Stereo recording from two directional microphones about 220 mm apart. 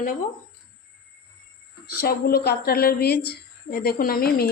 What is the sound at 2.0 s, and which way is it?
Speech, 45° left (ahead or behind).